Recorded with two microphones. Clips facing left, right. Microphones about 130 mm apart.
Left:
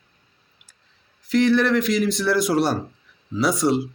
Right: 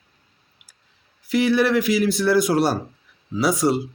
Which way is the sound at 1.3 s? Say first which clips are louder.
Even; 5° right (ahead or behind).